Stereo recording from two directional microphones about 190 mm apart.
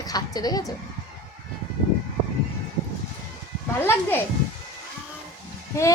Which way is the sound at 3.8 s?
10° left (ahead or behind).